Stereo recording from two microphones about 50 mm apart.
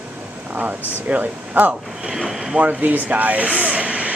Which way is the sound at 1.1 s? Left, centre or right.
Right.